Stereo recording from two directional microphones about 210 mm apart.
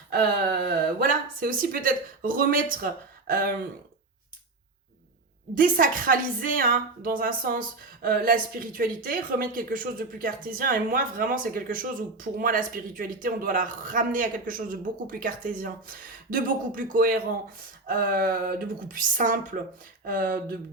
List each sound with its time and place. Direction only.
0.1 s speech: 45° right (ahead or behind)
5.5 s speech: 40° right (ahead or behind)